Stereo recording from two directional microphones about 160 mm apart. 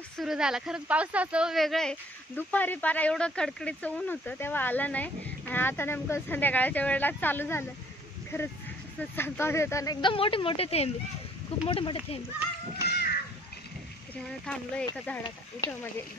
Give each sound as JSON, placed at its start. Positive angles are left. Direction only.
{"t": 0.2, "sound": "speech", "side_deg": -5}
{"t": 10.0, "sound": "speech", "side_deg": 35}
{"t": 12.8, "sound": "crow", "side_deg": 90}
{"t": 14.1, "sound": "speech", "side_deg": 5}